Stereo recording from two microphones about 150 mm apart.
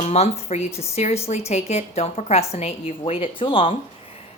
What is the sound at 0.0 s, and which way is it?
A woman's voice, 45° left (ahead or behind).